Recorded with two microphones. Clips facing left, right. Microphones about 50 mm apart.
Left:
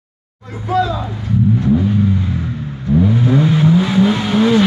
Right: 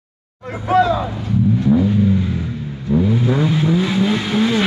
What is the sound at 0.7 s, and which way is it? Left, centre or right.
Speech, right.